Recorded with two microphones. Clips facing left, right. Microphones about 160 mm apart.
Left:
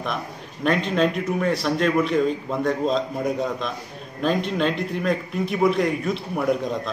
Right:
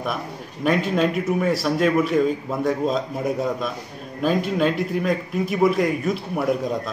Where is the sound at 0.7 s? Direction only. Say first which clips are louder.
Right 1 dB; 5° right (ahead or behind).